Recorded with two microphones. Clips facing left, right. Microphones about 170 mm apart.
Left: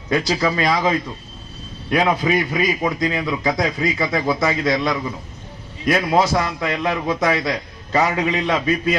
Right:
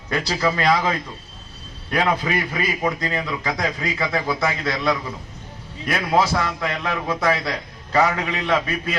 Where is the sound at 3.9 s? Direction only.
20° left (ahead or behind).